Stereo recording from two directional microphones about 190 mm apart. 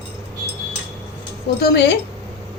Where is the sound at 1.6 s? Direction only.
60° left (ahead or behind).